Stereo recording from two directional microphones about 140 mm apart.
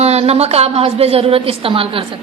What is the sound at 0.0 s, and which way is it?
A woman's voice, 50° right (ahead or behind).